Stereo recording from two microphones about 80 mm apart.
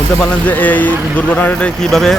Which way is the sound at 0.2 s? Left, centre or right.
Left.